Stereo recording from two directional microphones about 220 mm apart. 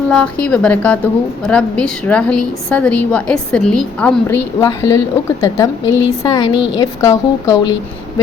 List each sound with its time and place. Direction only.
0.1 s a woman's voice: 5° left (ahead or behind)
4.6 s a woman's voice: 15° left (ahead or behind)